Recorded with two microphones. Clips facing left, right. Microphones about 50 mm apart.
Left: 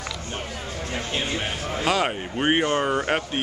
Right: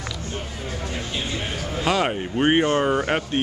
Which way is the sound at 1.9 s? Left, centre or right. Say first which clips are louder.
Right 2 dB; centre.